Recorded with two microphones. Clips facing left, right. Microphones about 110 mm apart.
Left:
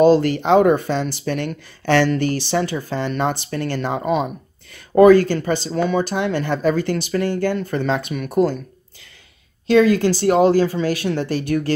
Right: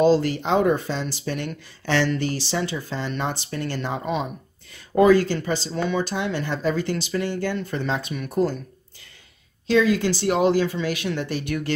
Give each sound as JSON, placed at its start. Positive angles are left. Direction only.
{"t": 0.0, "sound": "speech", "side_deg": 60}
{"t": 9.7, "sound": "speech", "side_deg": 55}